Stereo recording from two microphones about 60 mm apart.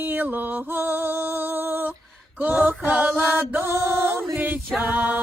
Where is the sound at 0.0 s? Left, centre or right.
Right.